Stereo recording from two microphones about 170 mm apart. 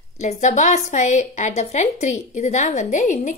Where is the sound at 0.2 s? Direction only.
45° left (ahead or behind).